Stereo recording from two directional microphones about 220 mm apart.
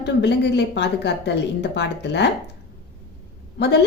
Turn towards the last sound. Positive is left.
turn(degrees=50)  # may be behind; listen again after turning